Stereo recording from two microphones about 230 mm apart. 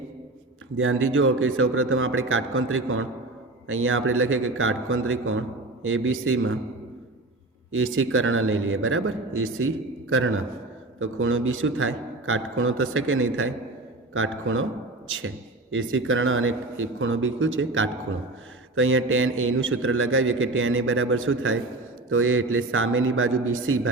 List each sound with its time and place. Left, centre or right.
0.8 s a man's voice: right
7.7 s a man's voice: right